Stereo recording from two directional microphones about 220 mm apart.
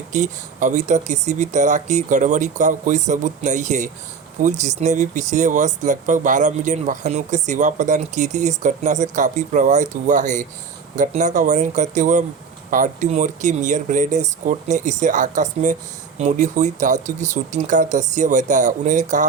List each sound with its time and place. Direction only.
0.1 s speech: 35° right (ahead or behind)